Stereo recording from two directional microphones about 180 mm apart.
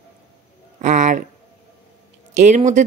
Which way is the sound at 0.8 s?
40° right (ahead or behind).